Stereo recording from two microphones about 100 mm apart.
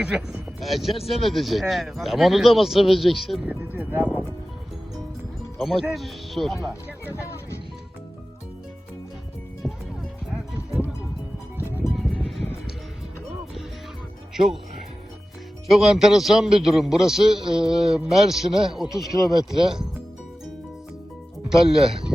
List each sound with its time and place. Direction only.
0.6 s a man's voice: centre (ahead or behind)
3.4 s speech: 15° right (ahead or behind)
5.5 s a man's voice: centre (ahead or behind)
11.9 s music: 5° right (ahead or behind)
14.3 s a man's voice: 5° right (ahead or behind)
15.7 s a man's voice: 5° right (ahead or behind)
21.5 s a man's voice: 5° right (ahead or behind)